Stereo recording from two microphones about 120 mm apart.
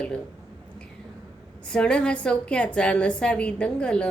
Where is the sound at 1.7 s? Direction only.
10° left (ahead or behind).